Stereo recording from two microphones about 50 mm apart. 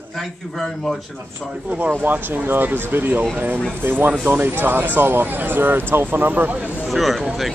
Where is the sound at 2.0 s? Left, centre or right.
Right.